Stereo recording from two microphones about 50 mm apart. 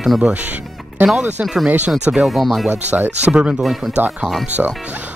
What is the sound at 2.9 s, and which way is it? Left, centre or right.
Speech, right.